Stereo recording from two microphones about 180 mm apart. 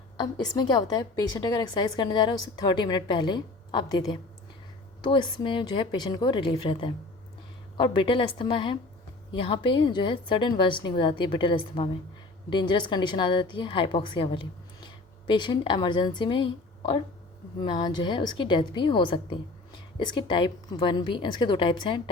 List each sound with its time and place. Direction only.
0.2 s a woman's voice: 20° left (ahead or behind)